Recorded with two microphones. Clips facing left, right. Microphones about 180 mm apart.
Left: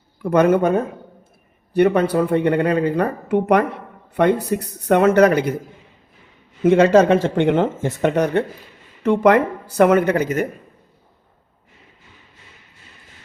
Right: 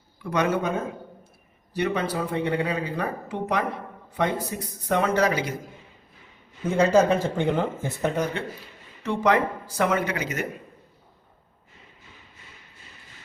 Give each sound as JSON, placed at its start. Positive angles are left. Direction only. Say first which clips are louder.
{"t": 0.2, "sound": "speech", "louder": "left 9 dB", "side_deg": 50}
{"t": 6.6, "sound": "speech", "louder": "left 7 dB", "side_deg": 90}
{"t": 9.0, "sound": "speech", "louder": "left 8 dB", "side_deg": 60}